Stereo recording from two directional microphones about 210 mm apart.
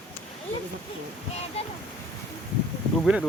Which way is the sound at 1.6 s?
30° left (ahead or behind).